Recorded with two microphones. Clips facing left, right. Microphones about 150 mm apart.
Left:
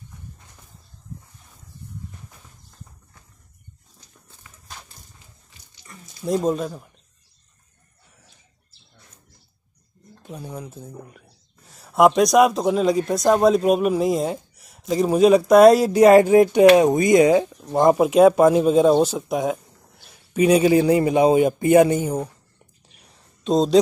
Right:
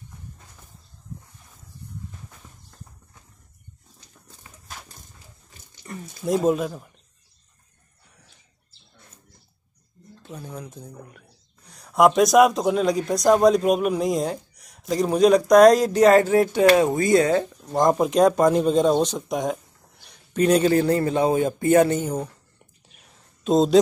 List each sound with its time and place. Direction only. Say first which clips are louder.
5.5 s a sound: right 10 dB; 50° right (ahead or behind)
6.2 s speech: right 1 dB; 5° right (ahead or behind)
10.2 s speech: left 2 dB; 10° left (ahead or behind)
23.4 s speech: even; centre (ahead or behind)